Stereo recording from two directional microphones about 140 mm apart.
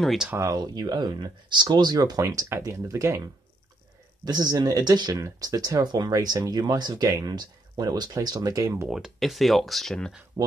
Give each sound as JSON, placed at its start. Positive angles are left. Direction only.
{"t": 0.0, "sound": "speech", "side_deg": 0}
{"t": 0.3, "sound": "speech", "side_deg": -25}
{"t": 4.2, "sound": "speech", "side_deg": -30}
{"t": 8.8, "sound": "speech", "side_deg": -5}
{"t": 10.4, "sound": "speech", "side_deg": -25}